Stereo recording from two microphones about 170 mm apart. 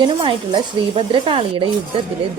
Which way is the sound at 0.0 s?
30° right (ahead or behind).